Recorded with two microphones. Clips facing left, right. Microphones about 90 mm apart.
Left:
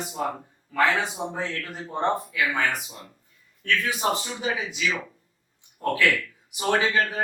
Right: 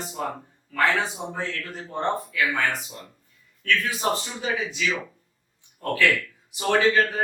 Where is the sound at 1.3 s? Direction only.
15° left (ahead or behind).